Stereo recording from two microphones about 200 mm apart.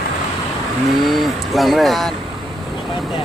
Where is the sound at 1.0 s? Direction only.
Centre (ahead or behind).